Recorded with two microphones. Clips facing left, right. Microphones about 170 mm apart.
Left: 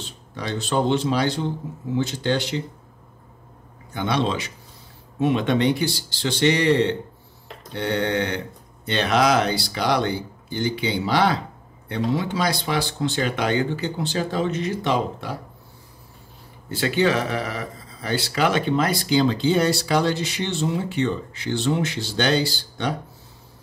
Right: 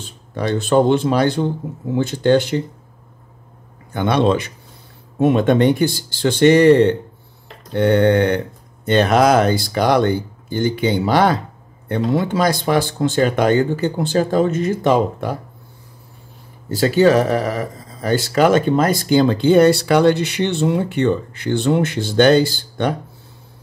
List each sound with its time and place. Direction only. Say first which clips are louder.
0.0 s speech: right 8 dB; 50° right (ahead or behind)
3.9 s speech: right 7 dB; 55° right (ahead or behind)
16.6 s speech: right 7 dB; 40° right (ahead or behind)